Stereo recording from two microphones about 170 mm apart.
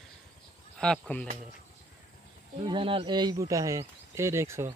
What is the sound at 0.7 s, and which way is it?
Speech, 5° left (ahead or behind).